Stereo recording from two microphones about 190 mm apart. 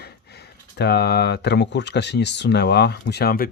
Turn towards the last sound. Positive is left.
turn(degrees=50)  # may be behind; listen again after turning